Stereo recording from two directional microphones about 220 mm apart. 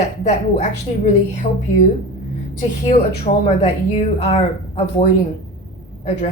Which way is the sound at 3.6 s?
25° left (ahead or behind).